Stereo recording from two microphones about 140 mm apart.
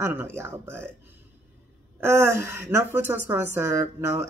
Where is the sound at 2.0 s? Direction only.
20° right (ahead or behind).